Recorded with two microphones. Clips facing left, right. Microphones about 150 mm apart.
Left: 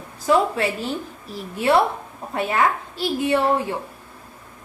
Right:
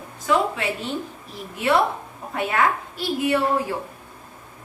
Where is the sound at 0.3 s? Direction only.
35° left (ahead or behind).